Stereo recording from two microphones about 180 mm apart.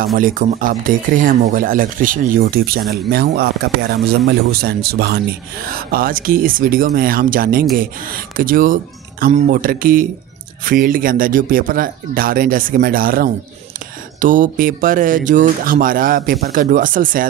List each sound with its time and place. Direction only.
0.0 s speech: 55° right (ahead or behind)